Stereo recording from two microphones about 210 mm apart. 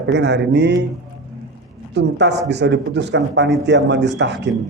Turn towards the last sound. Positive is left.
turn(degrees=-55)  # may be behind; listen again after turning